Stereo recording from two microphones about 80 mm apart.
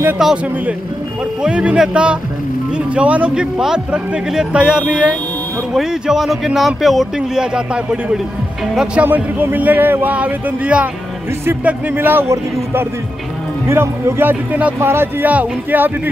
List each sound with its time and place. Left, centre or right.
0.2 s a man's voice: centre
1.4 s a man's voice: centre
8.9 s speech: right
13.7 s speech: right